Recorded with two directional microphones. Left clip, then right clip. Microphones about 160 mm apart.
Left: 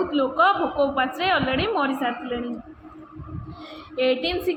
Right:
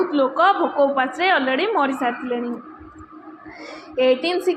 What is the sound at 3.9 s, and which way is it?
Speech, 15° right (ahead or behind).